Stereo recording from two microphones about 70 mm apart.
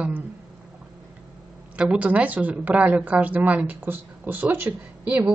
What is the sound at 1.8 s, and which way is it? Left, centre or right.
Speech, centre.